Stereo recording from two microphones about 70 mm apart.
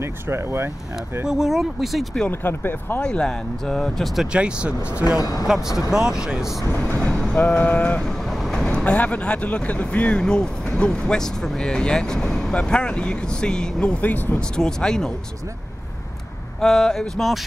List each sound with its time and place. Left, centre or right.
0.0 s speech: right
1.2 s speech: centre
2.4 s vehicle: left
3.0 s speech: centre
4.3 s speech: centre
5.2 s speech: left
5.5 s speech: centre
7.0 s speech: centre
7.3 s vehicle: left
8.0 s vehicle: centre
8.7 s speech: centre
16.5 s speech: centre